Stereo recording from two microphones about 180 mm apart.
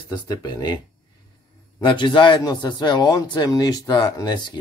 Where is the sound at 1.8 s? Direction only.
25° left (ahead or behind).